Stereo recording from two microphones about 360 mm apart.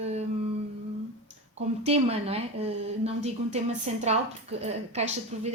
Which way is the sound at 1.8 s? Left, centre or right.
Centre.